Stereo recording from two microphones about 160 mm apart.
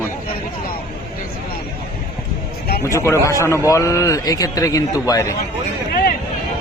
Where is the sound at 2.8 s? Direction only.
20° left (ahead or behind).